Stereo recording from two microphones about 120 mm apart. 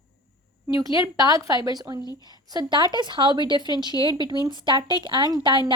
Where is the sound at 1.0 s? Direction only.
30° right (ahead or behind).